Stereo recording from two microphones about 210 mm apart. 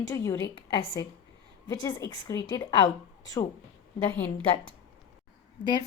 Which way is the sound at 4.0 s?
10° left (ahead or behind).